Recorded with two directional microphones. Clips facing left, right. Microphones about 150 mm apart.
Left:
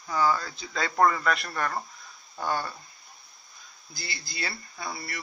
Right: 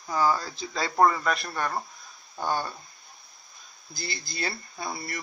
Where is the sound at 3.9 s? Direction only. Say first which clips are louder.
Right 3 dB; 45° right (ahead or behind).